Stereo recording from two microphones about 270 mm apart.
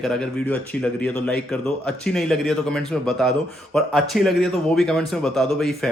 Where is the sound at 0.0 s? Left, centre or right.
Centre.